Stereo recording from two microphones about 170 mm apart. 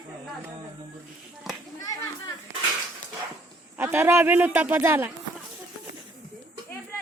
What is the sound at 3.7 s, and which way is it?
A man's voice, 15° right (ahead or behind).